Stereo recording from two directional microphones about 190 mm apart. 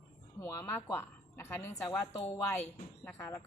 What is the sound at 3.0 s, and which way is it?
Speech, 15° left (ahead or behind).